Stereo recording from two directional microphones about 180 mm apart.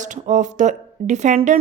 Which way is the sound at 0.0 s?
45° right (ahead or behind).